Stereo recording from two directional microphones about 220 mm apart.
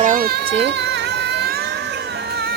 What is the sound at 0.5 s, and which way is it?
Speech, 50° right (ahead or behind).